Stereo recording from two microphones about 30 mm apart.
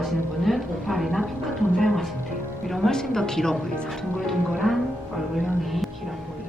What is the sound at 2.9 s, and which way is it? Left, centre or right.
Speech, centre.